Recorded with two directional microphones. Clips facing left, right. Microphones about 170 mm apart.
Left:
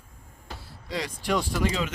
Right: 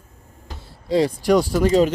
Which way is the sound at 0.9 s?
35° right (ahead or behind).